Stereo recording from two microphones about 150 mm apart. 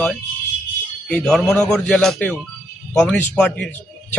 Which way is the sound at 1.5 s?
15° left (ahead or behind).